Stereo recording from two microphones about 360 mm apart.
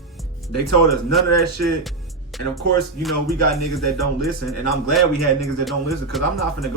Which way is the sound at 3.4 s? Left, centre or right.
Left.